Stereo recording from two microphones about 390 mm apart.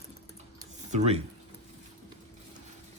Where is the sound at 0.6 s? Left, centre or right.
Centre.